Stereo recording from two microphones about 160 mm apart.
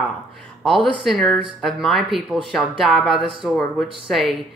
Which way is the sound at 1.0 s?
5° left (ahead or behind).